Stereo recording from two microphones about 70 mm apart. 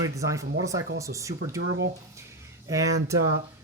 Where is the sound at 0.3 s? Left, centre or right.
Right.